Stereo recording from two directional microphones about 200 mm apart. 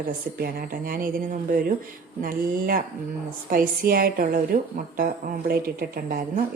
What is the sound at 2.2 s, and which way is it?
A woman's voice, 45° right (ahead or behind).